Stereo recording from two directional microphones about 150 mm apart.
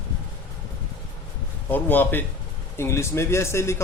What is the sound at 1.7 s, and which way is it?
A man's voice, 15° left (ahead or behind).